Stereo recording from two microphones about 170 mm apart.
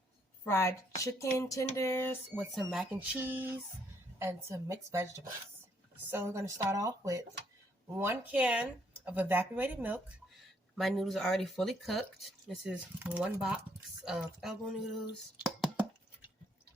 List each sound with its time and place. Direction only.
0.4 s speech: 15° left (ahead or behind)
2.4 s speech: centre (ahead or behind)
10.8 s speech: centre (ahead or behind)